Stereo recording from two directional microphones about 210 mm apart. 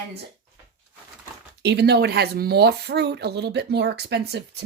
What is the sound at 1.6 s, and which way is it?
Speech, 50° right (ahead or behind).